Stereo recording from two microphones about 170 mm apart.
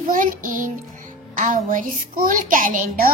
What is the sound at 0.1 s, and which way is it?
Child singing, 50° right (ahead or behind).